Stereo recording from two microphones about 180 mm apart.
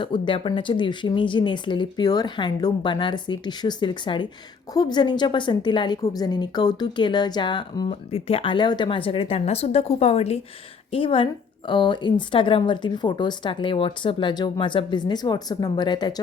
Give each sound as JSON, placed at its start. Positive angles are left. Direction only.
{"t": 0.0, "sound": "a woman's voice", "side_deg": 25}